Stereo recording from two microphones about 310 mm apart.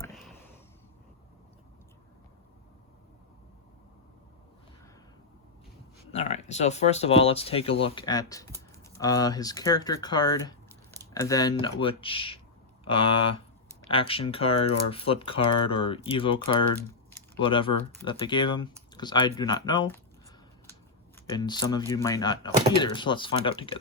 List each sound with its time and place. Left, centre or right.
0.0 s a sound: centre
6.1 s speech: left
13.1 s speech: left
13.9 s speech: centre
21.2 s speech: centre